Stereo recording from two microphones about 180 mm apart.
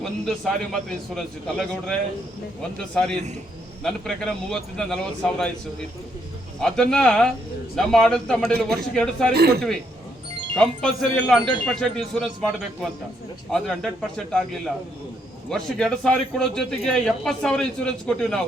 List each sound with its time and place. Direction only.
0.0 s a man's voice: centre (ahead or behind)
6.6 s a man's voice: 5° left (ahead or behind)
9.3 s speech: 60° right (ahead or behind)
10.5 s a man's voice: 5° left (ahead or behind)